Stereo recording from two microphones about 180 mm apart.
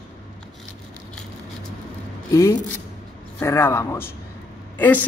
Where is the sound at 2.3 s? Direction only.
15° left (ahead or behind).